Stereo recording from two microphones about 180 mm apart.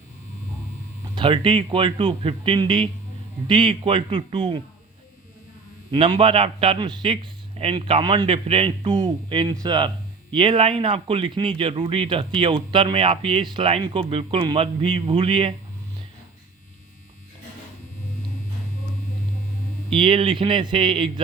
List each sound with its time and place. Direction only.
1.1 s speech: 30° right (ahead or behind)
5.9 s speech: 30° right (ahead or behind)
19.9 s speech: 30° right (ahead or behind)